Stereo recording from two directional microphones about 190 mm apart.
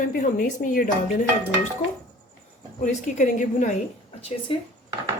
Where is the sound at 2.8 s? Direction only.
40° left (ahead or behind).